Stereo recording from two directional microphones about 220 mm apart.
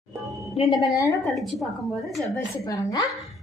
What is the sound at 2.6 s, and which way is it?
Speech, 15° left (ahead or behind).